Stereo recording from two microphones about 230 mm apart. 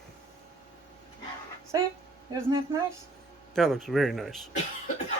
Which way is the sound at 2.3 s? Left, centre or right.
Centre.